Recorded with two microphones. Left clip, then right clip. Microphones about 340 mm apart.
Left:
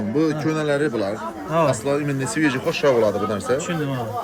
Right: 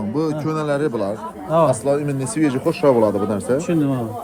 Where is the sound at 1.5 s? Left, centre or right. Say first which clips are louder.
Right 4 dB; centre.